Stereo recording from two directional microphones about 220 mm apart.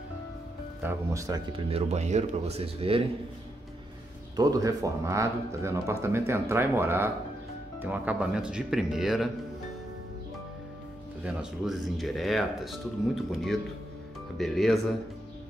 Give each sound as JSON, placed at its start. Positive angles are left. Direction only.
{"t": 0.8, "sound": "speech", "side_deg": -15}
{"t": 1.7, "sound": "speech", "side_deg": -30}
{"t": 4.4, "sound": "speech", "side_deg": -15}
{"t": 11.2, "sound": "speech", "side_deg": 0}